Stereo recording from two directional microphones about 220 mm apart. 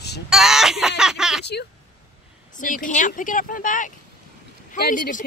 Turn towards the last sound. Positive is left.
turn(degrees=35)  # may be behind; listen again after turning